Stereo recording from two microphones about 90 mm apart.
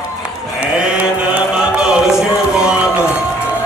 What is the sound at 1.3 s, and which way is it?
Music, 10° right (ahead or behind).